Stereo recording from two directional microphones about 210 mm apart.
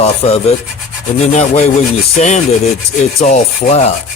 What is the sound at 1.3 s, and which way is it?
Rub, 35° left (ahead or behind).